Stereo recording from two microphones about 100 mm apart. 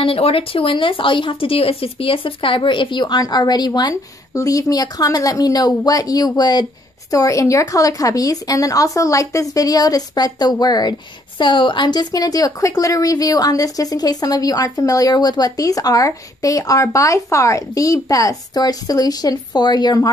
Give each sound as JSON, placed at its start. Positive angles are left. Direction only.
{"t": 0.0, "sound": "speech", "side_deg": 70}